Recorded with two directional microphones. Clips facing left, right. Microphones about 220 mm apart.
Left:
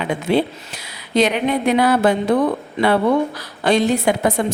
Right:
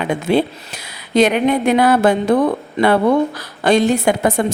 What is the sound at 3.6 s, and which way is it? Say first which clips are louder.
Speech: right 2 dB; 45° right (ahead or behind).